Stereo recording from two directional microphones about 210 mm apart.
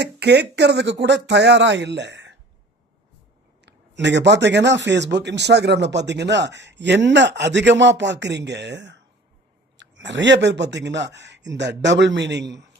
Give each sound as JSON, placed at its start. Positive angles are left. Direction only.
{"t": 0.0, "sound": "speech", "side_deg": -55}
{"t": 3.7, "sound": "speech", "side_deg": -55}